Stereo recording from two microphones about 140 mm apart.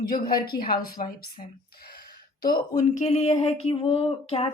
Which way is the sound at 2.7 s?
60° left (ahead or behind).